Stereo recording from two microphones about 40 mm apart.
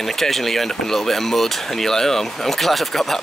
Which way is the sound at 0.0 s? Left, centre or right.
Centre.